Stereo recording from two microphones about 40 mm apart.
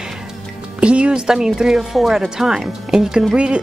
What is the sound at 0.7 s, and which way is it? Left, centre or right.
A woman's voice, right.